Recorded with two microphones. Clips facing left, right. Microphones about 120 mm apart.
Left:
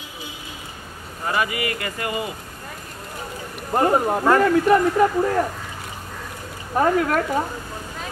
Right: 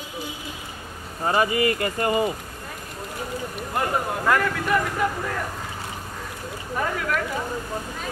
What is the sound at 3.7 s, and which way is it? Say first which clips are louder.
Speech: left 7 dB; 35° left (ahead or behind).